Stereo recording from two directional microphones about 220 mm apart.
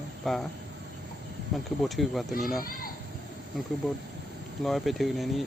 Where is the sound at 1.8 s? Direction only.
Centre (ahead or behind).